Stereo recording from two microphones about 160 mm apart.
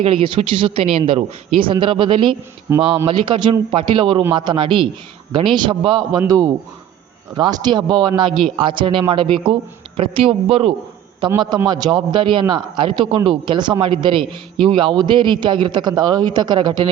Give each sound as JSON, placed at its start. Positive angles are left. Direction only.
{"t": 0.0, "sound": "speech", "side_deg": -35}
{"t": 2.7, "sound": "speech", "side_deg": -15}
{"t": 3.1, "sound": "a man's voice", "side_deg": -30}